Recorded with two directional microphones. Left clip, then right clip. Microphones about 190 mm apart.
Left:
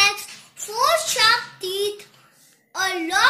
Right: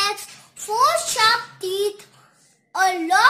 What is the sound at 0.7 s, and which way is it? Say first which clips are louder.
Child singing: right 1 dB; 30° right (ahead or behind).